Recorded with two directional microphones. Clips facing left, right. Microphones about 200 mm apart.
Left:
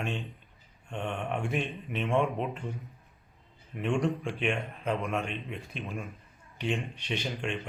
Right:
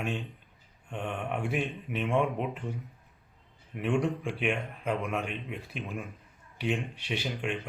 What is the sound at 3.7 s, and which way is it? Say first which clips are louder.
A man's voice: even; 5° right (ahead or behind).